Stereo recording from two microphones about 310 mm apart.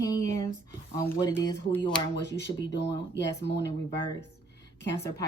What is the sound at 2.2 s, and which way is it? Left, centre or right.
Speech, left.